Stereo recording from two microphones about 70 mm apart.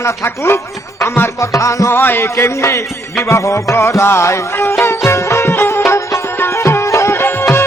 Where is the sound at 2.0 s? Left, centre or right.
Left.